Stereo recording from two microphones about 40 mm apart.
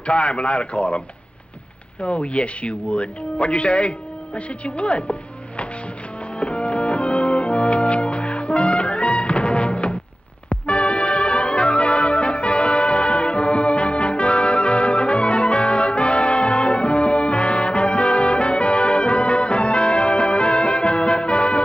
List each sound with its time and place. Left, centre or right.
0.0 s speech: left
2.0 s speech: left
6.3 s music: left